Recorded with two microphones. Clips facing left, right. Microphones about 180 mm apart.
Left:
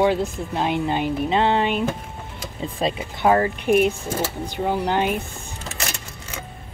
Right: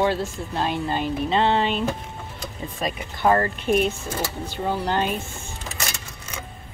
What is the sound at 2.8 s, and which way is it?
Speech, 25° left (ahead or behind).